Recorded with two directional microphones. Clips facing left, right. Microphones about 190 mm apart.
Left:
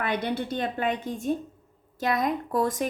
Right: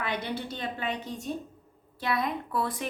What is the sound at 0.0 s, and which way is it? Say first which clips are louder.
A woman's voice: left 5 dB; 50° left (ahead or behind).